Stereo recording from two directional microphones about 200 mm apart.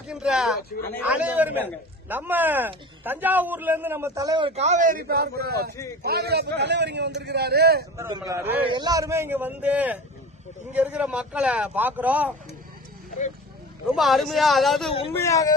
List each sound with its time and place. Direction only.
0.1 s a man's voice: 5° right (ahead or behind); by 7.9 s 55° right (ahead or behind)
7.9 s speech: 15° right (ahead or behind)
13.9 s speech: centre (ahead or behind)
15.1 s speech: 15° left (ahead or behind)